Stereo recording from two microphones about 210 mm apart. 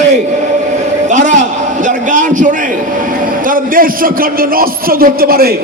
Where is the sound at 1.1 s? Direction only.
35° right (ahead or behind).